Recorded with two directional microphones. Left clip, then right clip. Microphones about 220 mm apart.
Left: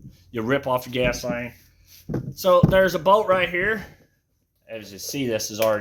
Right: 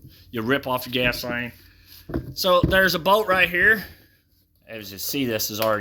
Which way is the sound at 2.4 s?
25° right (ahead or behind).